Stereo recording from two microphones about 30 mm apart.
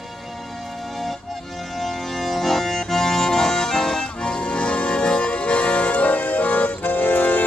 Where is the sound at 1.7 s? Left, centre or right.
Centre.